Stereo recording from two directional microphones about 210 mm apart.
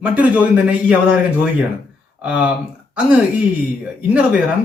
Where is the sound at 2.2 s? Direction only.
5° right (ahead or behind).